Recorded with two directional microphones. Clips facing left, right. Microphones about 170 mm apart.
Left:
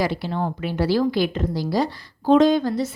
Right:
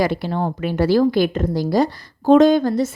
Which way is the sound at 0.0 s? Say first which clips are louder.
Right 4 dB; 50° right (ahead or behind).